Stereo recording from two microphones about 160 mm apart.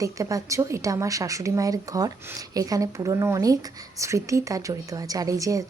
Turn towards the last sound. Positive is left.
turn(degrees=-20)  # may be behind; listen again after turning